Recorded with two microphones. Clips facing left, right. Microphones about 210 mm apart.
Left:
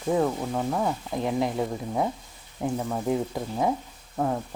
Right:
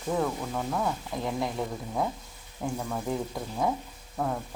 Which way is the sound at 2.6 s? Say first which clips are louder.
Left 5 dB; 20° left (ahead or behind).